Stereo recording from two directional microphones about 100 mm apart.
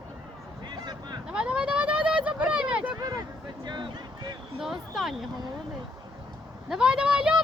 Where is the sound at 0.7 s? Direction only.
45° right (ahead or behind).